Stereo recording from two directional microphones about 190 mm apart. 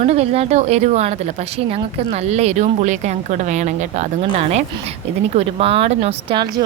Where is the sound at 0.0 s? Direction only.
35° right (ahead or behind).